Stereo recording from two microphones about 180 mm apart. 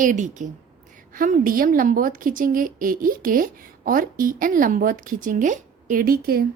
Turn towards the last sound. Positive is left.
turn(degrees=-55)  # may be behind; listen again after turning